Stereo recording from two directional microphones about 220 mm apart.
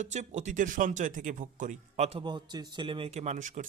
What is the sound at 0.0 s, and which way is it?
Speech, 30° right (ahead or behind).